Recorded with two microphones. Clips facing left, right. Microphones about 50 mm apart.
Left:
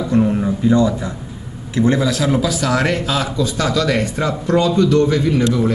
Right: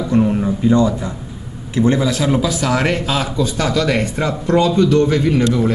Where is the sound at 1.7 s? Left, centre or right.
Right.